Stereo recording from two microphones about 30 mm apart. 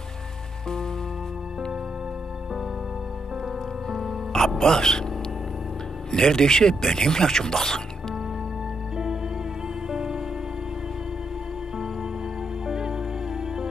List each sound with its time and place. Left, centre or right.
3.9 s music: centre
4.4 s music: centre
4.6 s speech: left
6.1 s speech: centre
8.9 s music: centre
12.6 s music: centre